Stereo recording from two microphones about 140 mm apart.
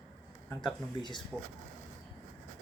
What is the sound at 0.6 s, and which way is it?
Speech, 35° left (ahead or behind).